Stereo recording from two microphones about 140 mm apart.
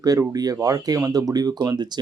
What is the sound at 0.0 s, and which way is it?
Speech, 25° right (ahead or behind).